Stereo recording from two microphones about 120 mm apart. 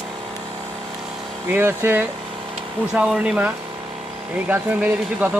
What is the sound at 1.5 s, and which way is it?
Speech, 15° right (ahead or behind).